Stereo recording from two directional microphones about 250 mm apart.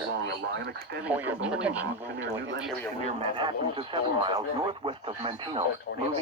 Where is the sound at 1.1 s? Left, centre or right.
Centre.